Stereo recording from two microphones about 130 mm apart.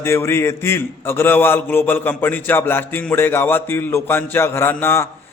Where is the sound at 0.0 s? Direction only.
20° left (ahead or behind).